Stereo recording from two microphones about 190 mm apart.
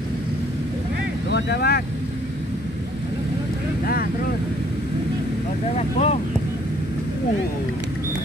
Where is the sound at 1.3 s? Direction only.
60° left (ahead or behind).